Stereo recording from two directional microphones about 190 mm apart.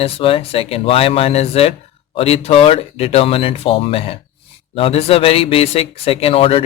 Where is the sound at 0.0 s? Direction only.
30° left (ahead or behind).